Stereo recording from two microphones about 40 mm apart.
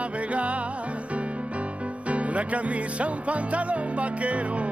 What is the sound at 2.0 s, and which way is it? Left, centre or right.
Music, right.